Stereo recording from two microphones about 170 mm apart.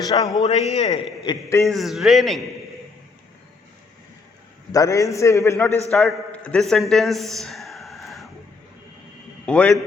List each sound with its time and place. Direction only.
0.0 s a man's voice: 20° left (ahead or behind)
0.4 s a man's voice: 40° left (ahead or behind)
1.2 s a man's voice: 20° left (ahead or behind)
1.6 s a man's voice: centre (ahead or behind)
4.7 s a man's voice: 20° left (ahead or behind)
5.9 s a man's voice: centre (ahead or behind)
6.9 s a sound: centre (ahead or behind)
9.5 s a man's voice: 5° left (ahead or behind)